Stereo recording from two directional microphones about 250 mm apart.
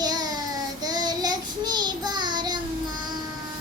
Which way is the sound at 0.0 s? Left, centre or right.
Centre.